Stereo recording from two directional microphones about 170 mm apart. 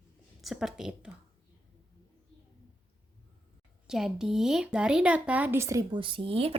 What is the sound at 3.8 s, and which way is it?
Speech, 5° right (ahead or behind).